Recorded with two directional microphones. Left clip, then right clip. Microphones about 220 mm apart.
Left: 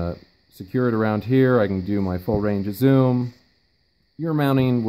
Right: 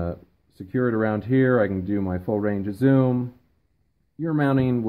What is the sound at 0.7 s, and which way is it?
Speech, 25° left (ahead or behind).